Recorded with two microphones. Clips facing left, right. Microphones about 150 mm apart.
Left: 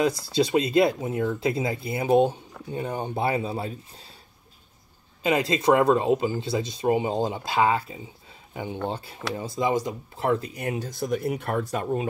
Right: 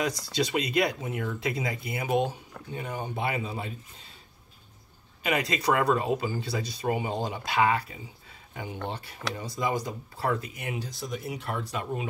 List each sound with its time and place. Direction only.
0.0 s speech: 30° left (ahead or behind)
5.2 s speech: 30° left (ahead or behind)